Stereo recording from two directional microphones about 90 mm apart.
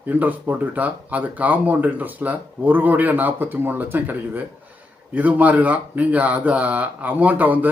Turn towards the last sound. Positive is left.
turn(degrees=-20)  # may be behind; listen again after turning